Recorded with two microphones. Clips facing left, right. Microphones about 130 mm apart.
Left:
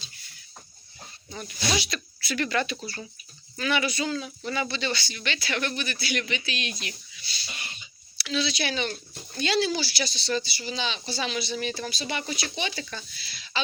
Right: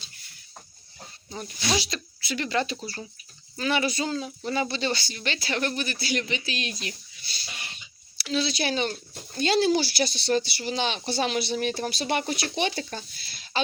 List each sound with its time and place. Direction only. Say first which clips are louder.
1.3 s speech: right 1 dB; 30° right (ahead or behind); by 12.8 s 55° right (ahead or behind)
12.8 s speech: right 3 dB; 40° right (ahead or behind)